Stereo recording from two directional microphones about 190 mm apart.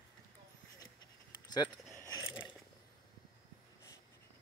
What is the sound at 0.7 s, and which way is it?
Dog, 20° left (ahead or behind).